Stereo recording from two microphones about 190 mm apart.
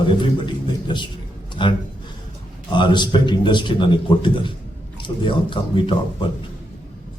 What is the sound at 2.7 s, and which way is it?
Speech, 25° left (ahead or behind).